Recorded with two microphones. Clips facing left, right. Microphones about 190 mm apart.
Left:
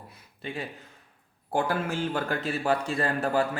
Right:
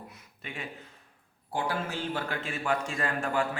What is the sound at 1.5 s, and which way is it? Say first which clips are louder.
Speech: left 5 dB; 50° left (ahead or behind).